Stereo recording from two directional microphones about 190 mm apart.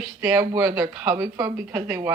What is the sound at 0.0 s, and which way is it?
Speech, 10° right (ahead or behind).